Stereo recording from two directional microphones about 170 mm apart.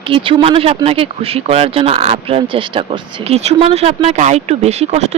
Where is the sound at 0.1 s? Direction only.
30° right (ahead or behind).